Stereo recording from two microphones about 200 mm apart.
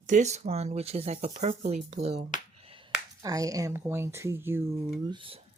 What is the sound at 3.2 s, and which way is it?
Speech, 15° right (ahead or behind).